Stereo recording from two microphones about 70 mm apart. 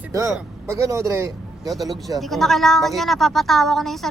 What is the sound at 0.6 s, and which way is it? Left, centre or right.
Speech, right.